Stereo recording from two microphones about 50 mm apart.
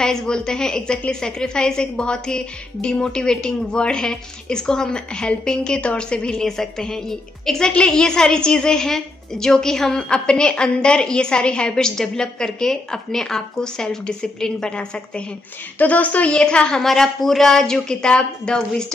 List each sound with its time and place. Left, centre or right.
0.0 s a woman's voice: centre
6.4 s a woman's voice: centre
15.8 s a woman's voice: left
16.3 s a woman's voice: centre